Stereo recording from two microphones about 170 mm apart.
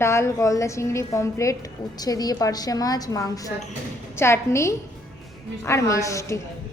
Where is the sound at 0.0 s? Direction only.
15° left (ahead or behind).